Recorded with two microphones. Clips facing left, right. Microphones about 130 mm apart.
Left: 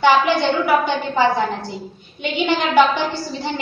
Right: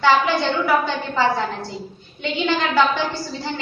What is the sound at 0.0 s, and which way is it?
A woman's voice, 15° left (ahead or behind).